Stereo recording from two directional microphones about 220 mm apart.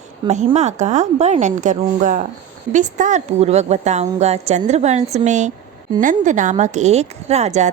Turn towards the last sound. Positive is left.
turn(degrees=-30)  # may be behind; listen again after turning